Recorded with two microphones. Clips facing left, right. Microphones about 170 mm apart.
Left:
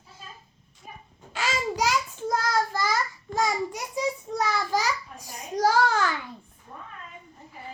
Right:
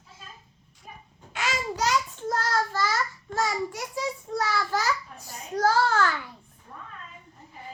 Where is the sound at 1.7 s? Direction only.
10° left (ahead or behind).